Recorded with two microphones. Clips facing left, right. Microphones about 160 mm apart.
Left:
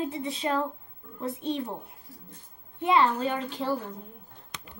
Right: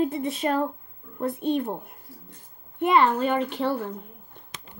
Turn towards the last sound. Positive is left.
turn(degrees=-65)  # may be behind; listen again after turning